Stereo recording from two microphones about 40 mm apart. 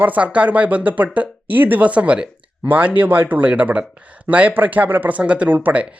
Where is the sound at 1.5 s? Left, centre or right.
Right.